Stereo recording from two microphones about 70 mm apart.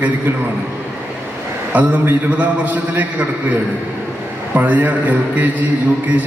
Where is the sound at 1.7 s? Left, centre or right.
Right.